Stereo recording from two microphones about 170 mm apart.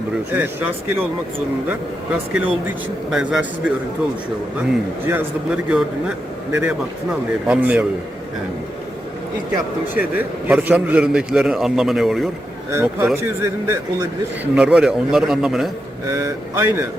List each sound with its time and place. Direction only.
0.3 s a man's voice: 10° right (ahead or behind)
2.5 s a man's voice: 5° right (ahead or behind)
5.0 s a man's voice: 10° right (ahead or behind)
9.9 s a man's voice: 10° right (ahead or behind)
12.7 s a man's voice: 15° right (ahead or behind)
14.5 s a man's voice: 5° right (ahead or behind)
16.0 s a man's voice: 15° right (ahead or behind)